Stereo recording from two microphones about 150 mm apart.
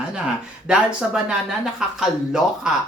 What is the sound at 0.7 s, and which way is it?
Speech, 5° right (ahead or behind).